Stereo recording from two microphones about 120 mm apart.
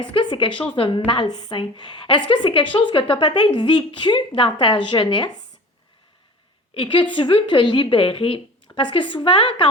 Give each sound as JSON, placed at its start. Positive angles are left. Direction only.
{"t": 0.0, "sound": "a woman's voice", "side_deg": 40}
{"t": 6.7, "sound": "a woman's voice", "side_deg": 45}